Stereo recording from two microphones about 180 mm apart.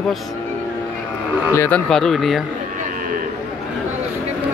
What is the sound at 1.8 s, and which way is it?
Speech, centre (ahead or behind).